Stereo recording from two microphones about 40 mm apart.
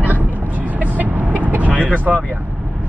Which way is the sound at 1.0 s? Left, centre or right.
Right.